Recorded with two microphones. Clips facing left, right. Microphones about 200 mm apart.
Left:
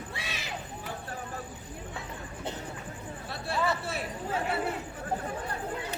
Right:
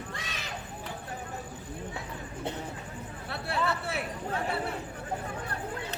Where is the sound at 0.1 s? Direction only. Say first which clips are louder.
Left 1 dB; 10° left (ahead or behind).